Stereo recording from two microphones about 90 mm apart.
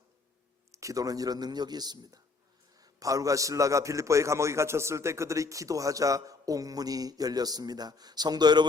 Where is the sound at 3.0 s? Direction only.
40° right (ahead or behind).